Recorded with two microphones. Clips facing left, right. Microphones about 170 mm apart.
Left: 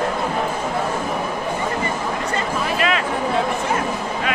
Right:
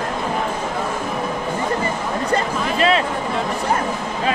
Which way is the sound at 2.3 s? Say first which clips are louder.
Right 4 dB; 35° right (ahead or behind).